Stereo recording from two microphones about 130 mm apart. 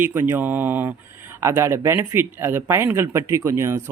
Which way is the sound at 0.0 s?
15° right (ahead or behind).